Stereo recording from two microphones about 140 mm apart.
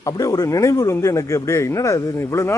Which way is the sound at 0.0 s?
25° left (ahead or behind).